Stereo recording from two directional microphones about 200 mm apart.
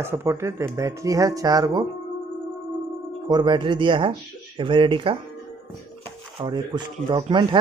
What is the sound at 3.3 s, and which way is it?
Speech, 20° right (ahead or behind).